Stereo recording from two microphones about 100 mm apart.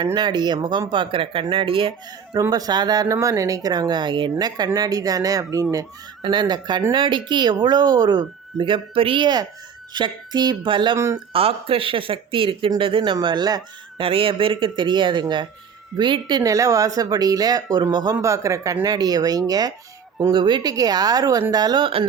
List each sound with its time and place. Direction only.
0.0 s speech: 40° right (ahead or behind); by 1.9 s 60° right (ahead or behind)
2.5 s speech: 40° right (ahead or behind)
6.2 s speech: 45° right (ahead or behind)
10.9 s speech: 30° right (ahead or behind)
11.3 s speech: 70° right (ahead or behind)
13.2 s speech: 45° right (ahead or behind)
14.0 s speech: 65° right (ahead or behind); by 18.2 s 45° right (ahead or behind)
18.2 s speech: 30° right (ahead or behind)
20.3 s speech: 55° right (ahead or behind)